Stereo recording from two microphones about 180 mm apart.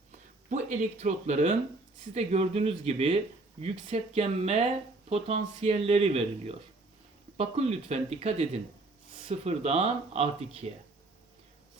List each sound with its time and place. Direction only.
0.5 s speech: 40° right (ahead or behind)